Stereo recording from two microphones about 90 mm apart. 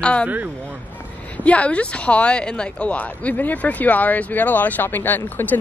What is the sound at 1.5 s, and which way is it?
Speech, 15° left (ahead or behind).